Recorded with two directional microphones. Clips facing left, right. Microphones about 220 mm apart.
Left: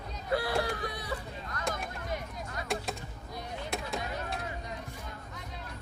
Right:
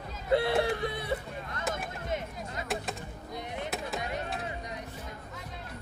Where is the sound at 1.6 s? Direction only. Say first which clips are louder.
Right 1 dB; 5° right (ahead or behind).